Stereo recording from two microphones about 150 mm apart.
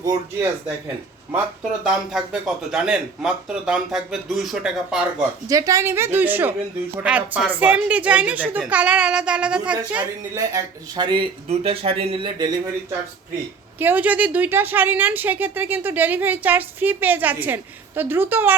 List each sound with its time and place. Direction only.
0.0 s speech: 20° right (ahead or behind)
1.8 s speech: 5° right (ahead or behind)
5.5 s speech: 20° right (ahead or behind)
10.3 s speech: 25° right (ahead or behind)
13.7 s speech: 10° right (ahead or behind)